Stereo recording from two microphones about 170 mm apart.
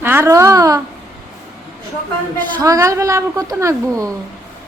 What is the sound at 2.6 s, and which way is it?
A woman's voice, 20° right (ahead or behind).